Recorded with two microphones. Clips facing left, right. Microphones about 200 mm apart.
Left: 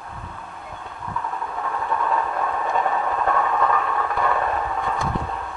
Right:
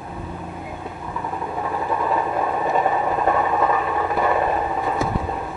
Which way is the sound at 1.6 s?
20° right (ahead or behind).